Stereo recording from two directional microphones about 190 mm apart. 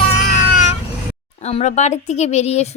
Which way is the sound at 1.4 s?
35° left (ahead or behind).